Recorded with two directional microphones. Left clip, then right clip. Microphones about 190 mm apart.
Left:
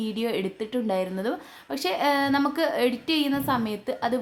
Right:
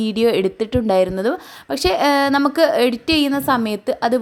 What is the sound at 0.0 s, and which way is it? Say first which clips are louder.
A woman's voice: right 11 dB; 40° right (ahead or behind).